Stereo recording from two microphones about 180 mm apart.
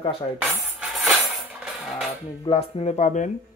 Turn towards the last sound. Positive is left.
turn(degrees=45)  # may be behind; listen again after turning